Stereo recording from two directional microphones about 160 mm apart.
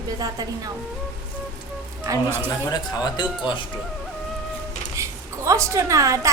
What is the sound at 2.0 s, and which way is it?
Speech, 15° right (ahead or behind).